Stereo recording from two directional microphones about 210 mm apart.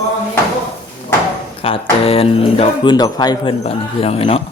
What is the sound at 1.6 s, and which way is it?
Speech, 25° left (ahead or behind).